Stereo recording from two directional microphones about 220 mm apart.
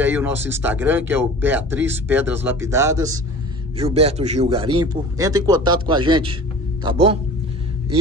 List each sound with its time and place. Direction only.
0.0 s speech: 10° right (ahead or behind)
3.7 s a man's voice: 25° right (ahead or behind)
4.7 s a man's voice: 15° right (ahead or behind)